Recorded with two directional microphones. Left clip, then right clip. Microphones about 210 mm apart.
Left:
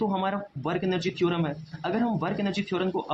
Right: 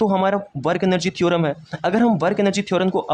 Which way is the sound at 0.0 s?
40° right (ahead or behind).